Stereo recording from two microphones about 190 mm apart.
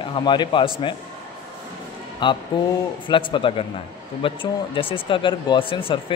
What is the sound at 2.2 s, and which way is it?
Speech, 25° left (ahead or behind).